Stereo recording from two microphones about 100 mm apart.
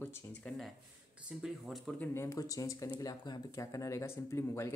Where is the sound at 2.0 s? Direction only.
25° left (ahead or behind).